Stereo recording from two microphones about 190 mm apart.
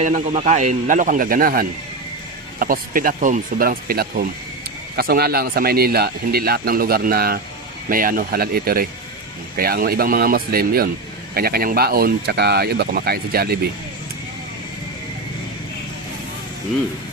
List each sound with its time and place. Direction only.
0.0 s speech: 40° right (ahead or behind); by 13.6 s 55° right (ahead or behind)